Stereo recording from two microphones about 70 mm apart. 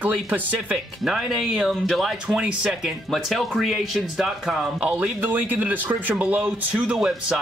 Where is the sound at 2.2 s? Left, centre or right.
Centre.